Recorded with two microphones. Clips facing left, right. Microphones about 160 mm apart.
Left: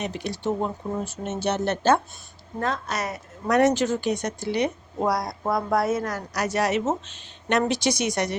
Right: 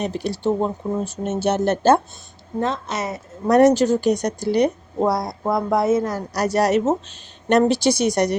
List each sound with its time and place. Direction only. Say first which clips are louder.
0.0 s speech: right 5 dB; 35° right (ahead or behind)
2.6 s a woman's voice: right 4 dB; 25° right (ahead or behind)
3.6 s speech: right 6 dB; 40° right (ahead or behind)
5.0 s a woman's voice: right 3 dB; 25° right (ahead or behind)